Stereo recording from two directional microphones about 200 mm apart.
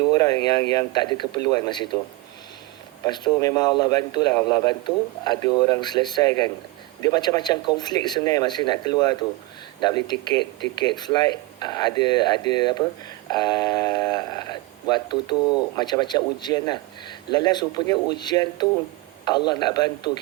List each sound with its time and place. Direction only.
0.1 s speech: 20° left (ahead or behind)
3.0 s speech: 20° left (ahead or behind)